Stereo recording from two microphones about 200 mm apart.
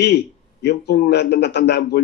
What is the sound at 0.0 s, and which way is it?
Speech, 55° left (ahead or behind).